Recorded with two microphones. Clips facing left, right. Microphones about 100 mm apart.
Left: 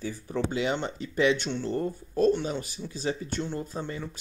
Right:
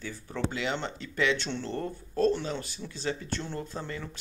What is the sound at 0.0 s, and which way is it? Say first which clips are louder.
Speech: left 3 dB; 20° left (ahead or behind).